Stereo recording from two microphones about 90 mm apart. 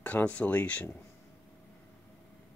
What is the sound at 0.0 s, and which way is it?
Speech, 15° left (ahead or behind).